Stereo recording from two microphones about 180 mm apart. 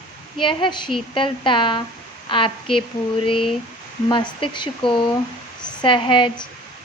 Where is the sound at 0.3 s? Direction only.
25° left (ahead or behind).